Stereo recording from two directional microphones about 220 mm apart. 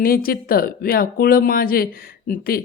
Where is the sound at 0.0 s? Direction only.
40° left (ahead or behind).